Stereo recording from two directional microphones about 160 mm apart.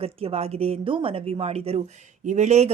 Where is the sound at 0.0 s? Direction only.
35° right (ahead or behind).